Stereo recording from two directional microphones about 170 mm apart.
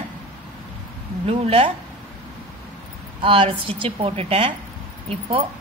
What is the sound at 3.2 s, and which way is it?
A woman's voice, 30° right (ahead or behind).